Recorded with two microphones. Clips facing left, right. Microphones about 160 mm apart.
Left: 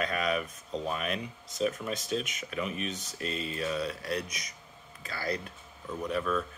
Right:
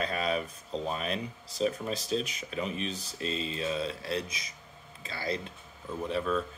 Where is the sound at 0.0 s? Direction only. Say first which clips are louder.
Even; 30° right (ahead or behind).